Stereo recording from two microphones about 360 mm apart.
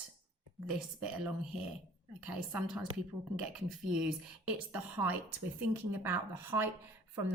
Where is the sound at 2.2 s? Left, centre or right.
Centre.